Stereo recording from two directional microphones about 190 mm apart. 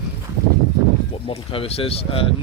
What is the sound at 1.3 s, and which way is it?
Speech, 30° left (ahead or behind).